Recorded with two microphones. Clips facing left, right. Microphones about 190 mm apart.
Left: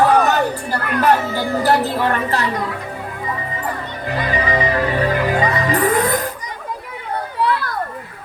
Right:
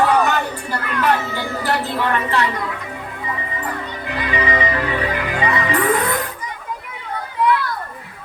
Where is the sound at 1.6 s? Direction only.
40° left (ahead or behind).